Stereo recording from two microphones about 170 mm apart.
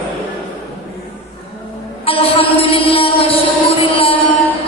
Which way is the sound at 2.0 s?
35° left (ahead or behind).